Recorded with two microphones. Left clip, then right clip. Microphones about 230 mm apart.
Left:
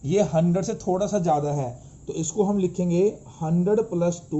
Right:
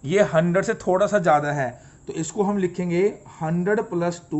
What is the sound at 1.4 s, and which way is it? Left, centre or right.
Speech, right.